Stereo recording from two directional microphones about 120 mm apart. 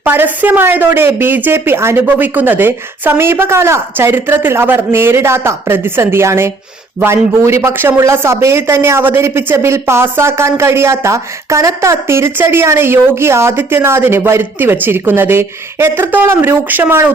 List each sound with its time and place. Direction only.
0.0 s a man's voice: 15° right (ahead or behind)